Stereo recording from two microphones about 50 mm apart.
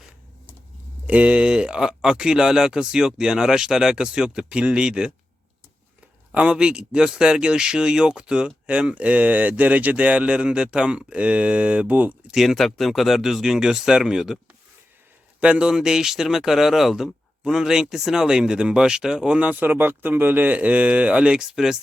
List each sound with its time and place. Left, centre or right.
1.0 s speech: right
6.3 s speech: right
12.3 s speech: centre
15.4 s speech: right
19.4 s speech: right; by 21.8 s centre